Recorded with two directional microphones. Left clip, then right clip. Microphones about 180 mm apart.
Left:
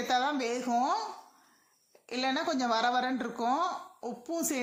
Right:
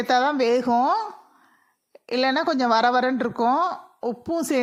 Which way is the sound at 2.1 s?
40° right (ahead or behind).